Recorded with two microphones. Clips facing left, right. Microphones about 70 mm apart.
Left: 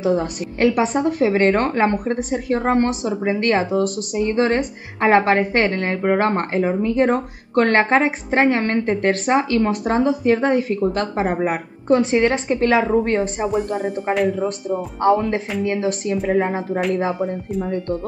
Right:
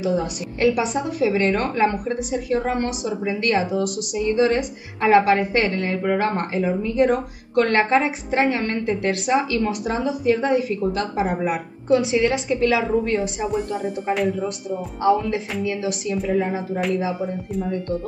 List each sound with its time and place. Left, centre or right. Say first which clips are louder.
0.0 s a woman's voice: left 3 dB; left
13.7 s speech: left 3 dB; left
14.7 s speech: left 2 dB; left
17.2 s speech: left 3 dB; centre